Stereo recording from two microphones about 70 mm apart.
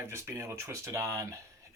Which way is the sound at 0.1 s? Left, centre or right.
Right.